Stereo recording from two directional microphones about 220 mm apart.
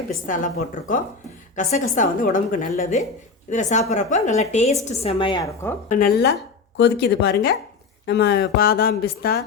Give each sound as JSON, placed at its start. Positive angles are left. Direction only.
{"t": 0.3, "sound": "a woman's voice", "side_deg": 35}
{"t": 5.9, "sound": "speech", "side_deg": 45}